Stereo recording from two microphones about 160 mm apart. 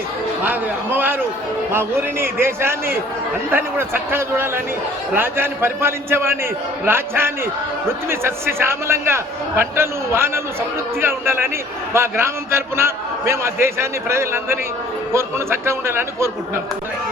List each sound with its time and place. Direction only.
0.4 s a man's voice: 10° right (ahead or behind)